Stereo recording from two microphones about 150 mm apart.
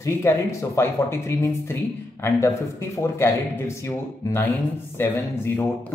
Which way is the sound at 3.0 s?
20° left (ahead or behind).